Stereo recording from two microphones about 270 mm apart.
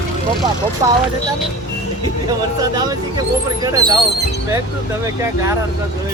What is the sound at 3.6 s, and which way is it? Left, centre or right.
Speech, centre.